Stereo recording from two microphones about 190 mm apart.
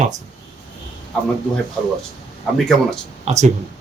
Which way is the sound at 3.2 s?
35° right (ahead or behind).